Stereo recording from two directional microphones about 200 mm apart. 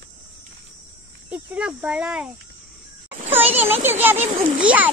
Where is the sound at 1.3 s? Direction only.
5° right (ahead or behind).